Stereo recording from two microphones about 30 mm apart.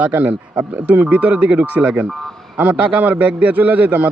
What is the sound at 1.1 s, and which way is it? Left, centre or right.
A man's voice, right.